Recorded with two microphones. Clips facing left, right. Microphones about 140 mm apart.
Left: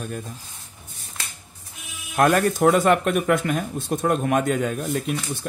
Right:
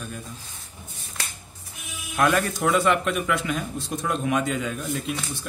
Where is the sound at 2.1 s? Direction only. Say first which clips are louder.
Left 4 dB; 45° left (ahead or behind).